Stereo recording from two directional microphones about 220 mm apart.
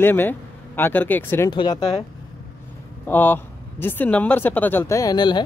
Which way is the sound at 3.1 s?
10° left (ahead or behind).